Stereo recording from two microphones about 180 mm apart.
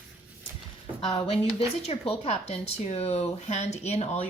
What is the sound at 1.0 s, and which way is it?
A woman's voice, 30° left (ahead or behind).